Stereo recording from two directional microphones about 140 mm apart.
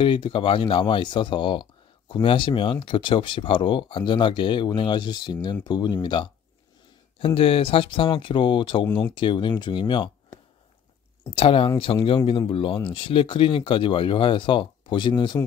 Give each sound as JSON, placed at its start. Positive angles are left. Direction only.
{"t": 0.0, "sound": "speech", "side_deg": 35}
{"t": 11.2, "sound": "speech", "side_deg": 40}